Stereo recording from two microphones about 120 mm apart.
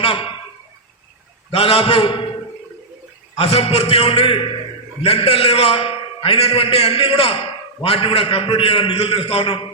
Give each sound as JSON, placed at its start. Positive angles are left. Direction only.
{"t": 0.0, "sound": "speech", "side_deg": 50}
{"t": 1.5, "sound": "a man's voice", "side_deg": 55}
{"t": 3.3, "sound": "a man's voice", "side_deg": 55}